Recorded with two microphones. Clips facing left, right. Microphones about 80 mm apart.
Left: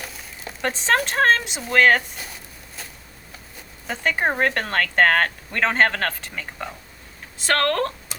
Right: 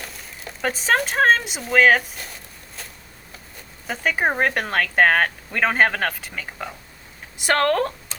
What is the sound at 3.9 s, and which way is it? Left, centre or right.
Speech, centre.